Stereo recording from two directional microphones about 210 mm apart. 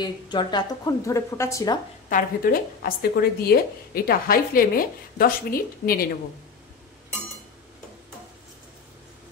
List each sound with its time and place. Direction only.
0.0 s speech: 20° left (ahead or behind)
2.0 s a woman's voice: 40° left (ahead or behind)